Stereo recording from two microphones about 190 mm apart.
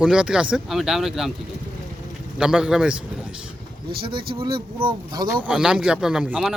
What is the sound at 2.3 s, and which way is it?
Speech, 5° right (ahead or behind).